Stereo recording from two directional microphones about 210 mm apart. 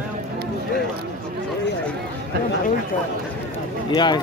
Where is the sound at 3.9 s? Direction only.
20° left (ahead or behind).